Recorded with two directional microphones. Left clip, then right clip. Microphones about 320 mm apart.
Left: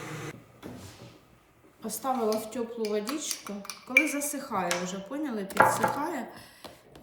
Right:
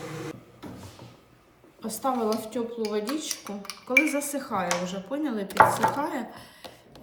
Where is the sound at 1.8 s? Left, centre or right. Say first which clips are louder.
Right 2 dB; centre.